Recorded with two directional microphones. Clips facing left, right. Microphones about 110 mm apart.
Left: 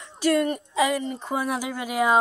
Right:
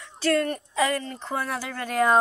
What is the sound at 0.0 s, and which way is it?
Speech, 15° left (ahead or behind).